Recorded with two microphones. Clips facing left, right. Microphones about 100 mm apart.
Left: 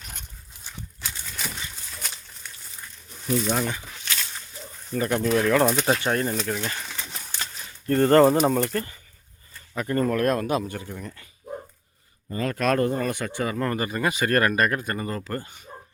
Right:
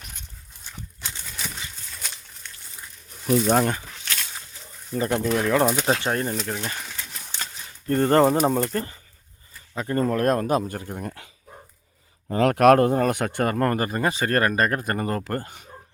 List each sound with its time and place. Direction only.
1.9 s a sound: 5° left (ahead or behind)
3.2 s speech: 15° right (ahead or behind)
3.5 s speech: 50° right (ahead or behind)
4.9 s speech: 25° right (ahead or behind)
7.3 s a sound: centre (ahead or behind)
7.9 s speech: 20° right (ahead or behind)
8.7 s speech: 30° right (ahead or behind)
10.2 s speech: 40° right (ahead or behind)
12.3 s speech: 75° right (ahead or behind); by 15.5 s 50° right (ahead or behind)